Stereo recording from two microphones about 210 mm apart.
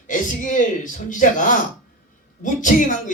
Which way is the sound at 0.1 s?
40° left (ahead or behind).